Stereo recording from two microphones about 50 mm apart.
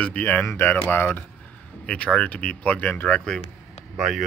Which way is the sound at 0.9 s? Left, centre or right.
Left.